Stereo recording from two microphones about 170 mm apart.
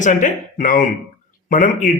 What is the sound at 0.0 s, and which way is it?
A man's voice, 50° left (ahead or behind).